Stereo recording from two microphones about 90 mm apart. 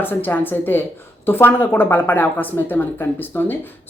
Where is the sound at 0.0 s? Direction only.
25° left (ahead or behind).